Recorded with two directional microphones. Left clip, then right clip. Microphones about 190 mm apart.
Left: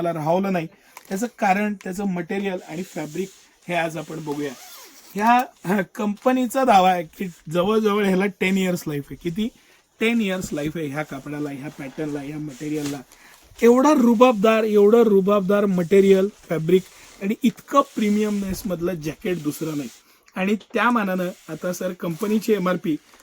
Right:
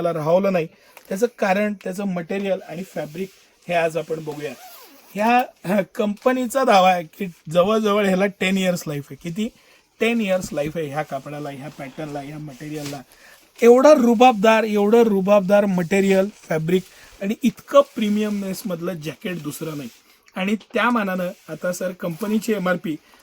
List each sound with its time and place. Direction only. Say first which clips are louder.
0.0 s speech: right 3 dB; 40° right (ahead or behind)
5.1 s speech: even; 35° right (ahead or behind)
13.6 s speech: right 4 dB; 50° right (ahead or behind)
17.7 s speech: right 4 dB; 35° right (ahead or behind)